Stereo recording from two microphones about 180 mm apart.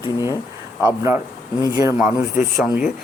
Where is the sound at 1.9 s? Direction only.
5° right (ahead or behind).